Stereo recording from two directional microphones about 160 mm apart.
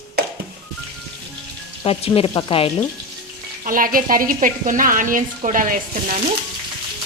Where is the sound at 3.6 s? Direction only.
60° right (ahead or behind).